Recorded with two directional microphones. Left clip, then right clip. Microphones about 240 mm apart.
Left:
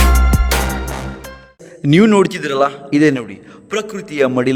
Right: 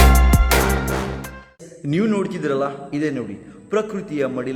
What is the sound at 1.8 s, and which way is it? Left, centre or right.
A man's voice, left.